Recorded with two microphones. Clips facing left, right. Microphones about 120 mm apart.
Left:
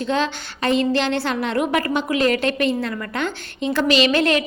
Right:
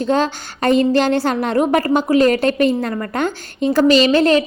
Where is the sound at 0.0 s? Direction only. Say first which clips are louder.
Right 4 dB; 40° right (ahead or behind).